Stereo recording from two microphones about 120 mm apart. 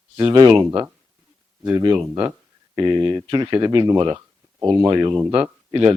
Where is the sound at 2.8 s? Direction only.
35° right (ahead or behind).